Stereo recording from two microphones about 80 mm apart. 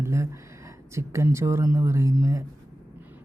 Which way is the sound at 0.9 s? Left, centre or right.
Right.